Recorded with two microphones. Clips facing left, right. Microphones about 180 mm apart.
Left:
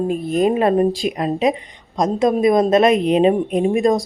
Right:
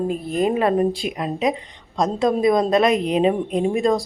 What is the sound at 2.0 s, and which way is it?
Speech, 20° left (ahead or behind).